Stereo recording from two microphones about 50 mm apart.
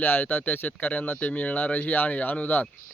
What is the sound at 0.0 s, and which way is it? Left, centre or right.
Speech, left.